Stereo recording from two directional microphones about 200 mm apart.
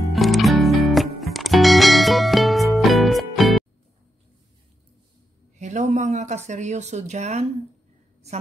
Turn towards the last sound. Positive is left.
turn(degrees=-35)  # may be behind; listen again after turning